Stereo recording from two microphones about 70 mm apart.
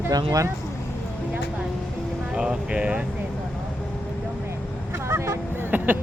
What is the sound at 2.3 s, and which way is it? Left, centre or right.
Speech, centre.